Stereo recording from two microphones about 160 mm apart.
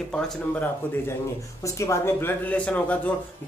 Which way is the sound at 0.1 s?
10° left (ahead or behind).